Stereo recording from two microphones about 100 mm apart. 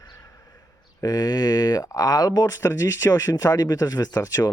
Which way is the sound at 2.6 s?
30° left (ahead or behind).